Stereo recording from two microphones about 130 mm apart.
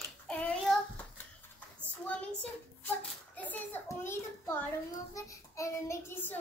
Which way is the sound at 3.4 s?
15° left (ahead or behind).